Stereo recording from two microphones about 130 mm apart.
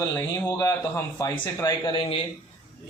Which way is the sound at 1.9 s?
45° left (ahead or behind).